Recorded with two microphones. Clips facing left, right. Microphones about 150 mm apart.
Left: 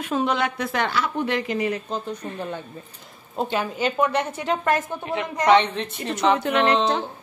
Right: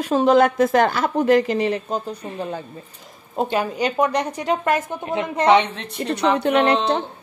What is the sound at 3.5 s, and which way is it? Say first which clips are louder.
Speech: right 2 dB; 40° right (ahead or behind).